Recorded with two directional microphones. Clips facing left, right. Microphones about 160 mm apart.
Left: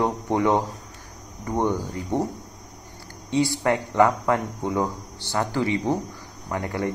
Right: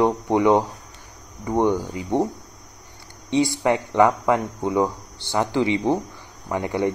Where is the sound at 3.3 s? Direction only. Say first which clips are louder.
Right 2 dB; 20° right (ahead or behind).